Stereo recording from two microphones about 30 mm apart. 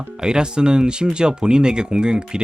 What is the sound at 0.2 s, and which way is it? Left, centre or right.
Speech, right.